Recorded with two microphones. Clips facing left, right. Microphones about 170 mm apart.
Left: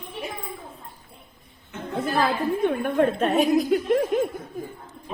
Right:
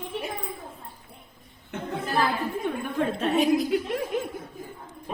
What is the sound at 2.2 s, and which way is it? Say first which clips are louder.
A woman's voice: left 5 dB; 55° left (ahead or behind).